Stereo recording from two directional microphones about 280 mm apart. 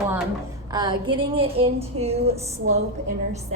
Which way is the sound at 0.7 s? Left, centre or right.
Centre.